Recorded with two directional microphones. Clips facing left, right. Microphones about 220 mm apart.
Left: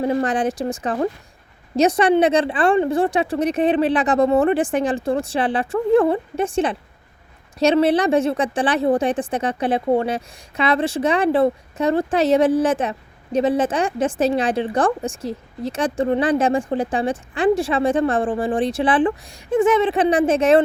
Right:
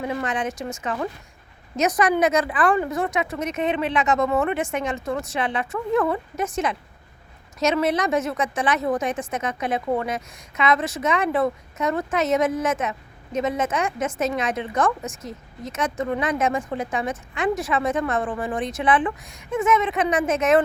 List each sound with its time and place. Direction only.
0.0 s a woman's voice: 35° left (ahead or behind)